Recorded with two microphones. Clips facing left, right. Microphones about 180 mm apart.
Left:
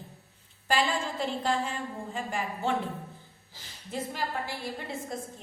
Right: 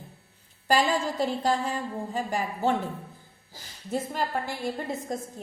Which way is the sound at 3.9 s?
50° right (ahead or behind).